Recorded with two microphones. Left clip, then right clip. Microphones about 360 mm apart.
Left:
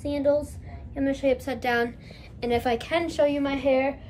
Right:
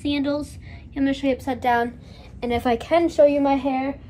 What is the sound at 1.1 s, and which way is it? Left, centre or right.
A woman's voice, centre.